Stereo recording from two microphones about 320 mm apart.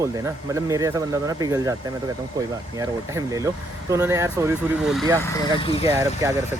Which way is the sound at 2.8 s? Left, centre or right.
Centre.